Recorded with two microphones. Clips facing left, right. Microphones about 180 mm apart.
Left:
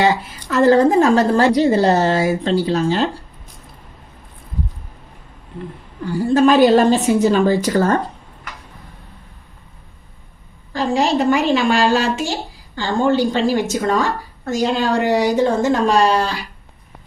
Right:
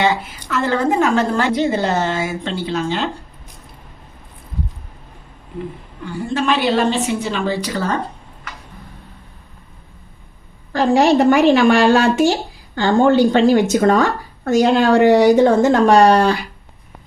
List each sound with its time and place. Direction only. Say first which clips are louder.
0.0 s a woman's voice: left 1 dB; 40° left (ahead or behind)
6.1 s a woman's voice: left 6 dB; 35° left (ahead or behind)
10.7 s a woman's voice: right 4 dB; 65° right (ahead or behind)